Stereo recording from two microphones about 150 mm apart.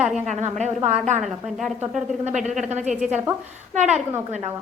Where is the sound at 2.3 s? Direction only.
50° right (ahead or behind).